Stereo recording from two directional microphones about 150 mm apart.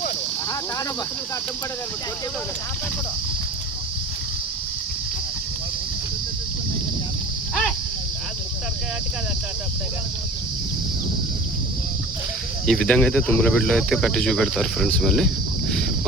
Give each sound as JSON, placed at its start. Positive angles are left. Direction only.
{"t": 12.6, "sound": "speech", "side_deg": 5}